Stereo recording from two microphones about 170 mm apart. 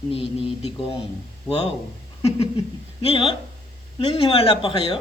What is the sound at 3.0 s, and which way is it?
Speech, 30° left (ahead or behind).